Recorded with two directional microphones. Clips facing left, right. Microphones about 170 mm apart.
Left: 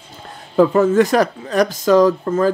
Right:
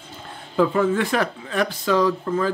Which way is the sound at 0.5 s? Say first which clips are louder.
Left 7 dB; 40° left (ahead or behind).